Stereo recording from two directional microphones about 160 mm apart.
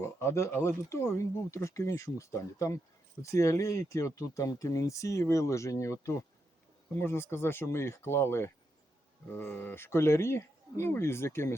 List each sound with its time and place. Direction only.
0.0 s speech: 15° left (ahead or behind)